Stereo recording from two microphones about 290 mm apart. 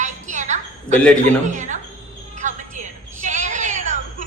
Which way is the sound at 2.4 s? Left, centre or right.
Right.